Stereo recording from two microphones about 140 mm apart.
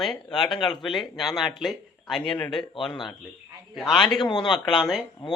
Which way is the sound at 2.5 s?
35° left (ahead or behind).